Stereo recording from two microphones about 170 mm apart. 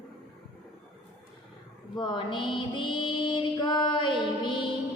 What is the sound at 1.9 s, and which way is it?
Mantra, 25° left (ahead or behind).